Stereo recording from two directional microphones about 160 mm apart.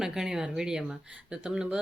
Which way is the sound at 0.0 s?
5° right (ahead or behind).